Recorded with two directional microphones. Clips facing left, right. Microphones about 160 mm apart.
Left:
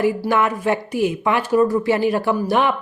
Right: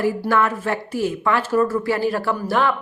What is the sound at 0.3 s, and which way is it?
Speech, 15° left (ahead or behind).